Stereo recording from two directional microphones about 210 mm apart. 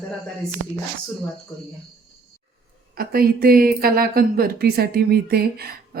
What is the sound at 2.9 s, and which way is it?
Speech, 45° right (ahead or behind).